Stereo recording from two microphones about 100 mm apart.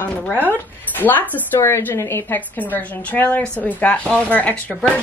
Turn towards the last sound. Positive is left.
turn(degrees=15)  # may be behind; listen again after turning